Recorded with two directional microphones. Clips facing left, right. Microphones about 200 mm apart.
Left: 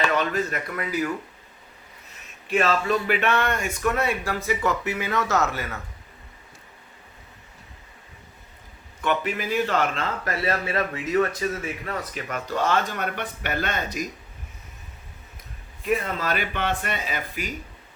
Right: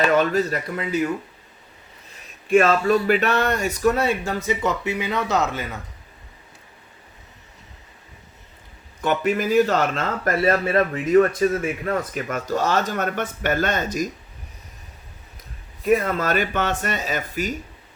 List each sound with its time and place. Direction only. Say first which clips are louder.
0.0 s speech: right 5 dB; 40° right (ahead or behind)
2.5 s speech: right 6 dB; 50° right (ahead or behind); by 5.8 s 20° right (ahead or behind)
9.0 s speech: right 4 dB; 45° right (ahead or behind)
15.8 s speech: right 6 dB; 45° right (ahead or behind)